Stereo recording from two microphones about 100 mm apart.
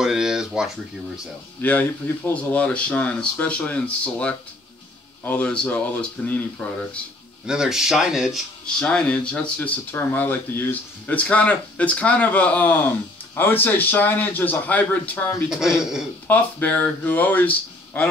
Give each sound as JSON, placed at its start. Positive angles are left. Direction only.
{"t": 0.0, "sound": "a sound", "side_deg": -5}
{"t": 1.6, "sound": "speech", "side_deg": 15}
{"t": 7.4, "sound": "speech", "side_deg": -5}
{"t": 8.6, "sound": "speech", "side_deg": 10}
{"t": 15.8, "sound": "speech", "side_deg": -5}
{"t": 16.3, "sound": "speech", "side_deg": 15}